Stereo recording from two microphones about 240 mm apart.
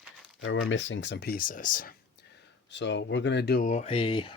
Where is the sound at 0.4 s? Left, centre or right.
Left.